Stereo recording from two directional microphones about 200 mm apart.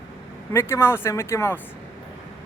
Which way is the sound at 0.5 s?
10° left (ahead or behind).